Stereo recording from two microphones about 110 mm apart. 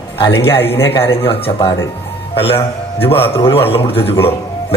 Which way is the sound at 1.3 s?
60° left (ahead or behind).